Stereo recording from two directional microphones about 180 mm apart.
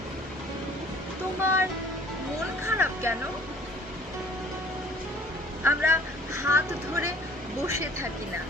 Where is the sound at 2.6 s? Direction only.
15° right (ahead or behind).